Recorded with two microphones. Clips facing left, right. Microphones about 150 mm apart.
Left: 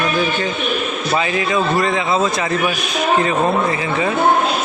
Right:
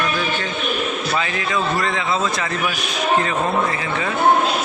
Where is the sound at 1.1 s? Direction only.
20° left (ahead or behind).